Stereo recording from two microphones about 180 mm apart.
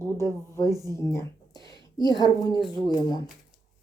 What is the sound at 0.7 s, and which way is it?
Speech, 20° right (ahead or behind).